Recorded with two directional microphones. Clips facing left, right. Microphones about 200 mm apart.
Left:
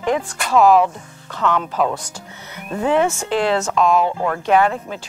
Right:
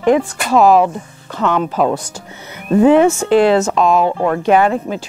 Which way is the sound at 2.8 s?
10° right (ahead or behind).